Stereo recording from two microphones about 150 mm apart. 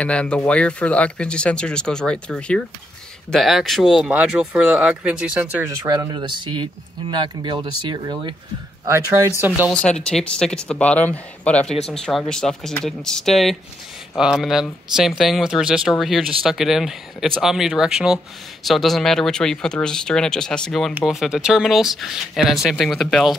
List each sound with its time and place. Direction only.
0.0 s speech: 5° left (ahead or behind); by 5.7 s 10° right (ahead or behind)
5.7 s speech: 25° right (ahead or behind)
8.8 s speech: 20° right (ahead or behind)
9.7 s speech: 5° left (ahead or behind)